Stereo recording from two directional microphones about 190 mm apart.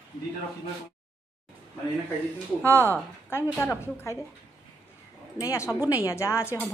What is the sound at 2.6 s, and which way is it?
Speech, 10° left (ahead or behind).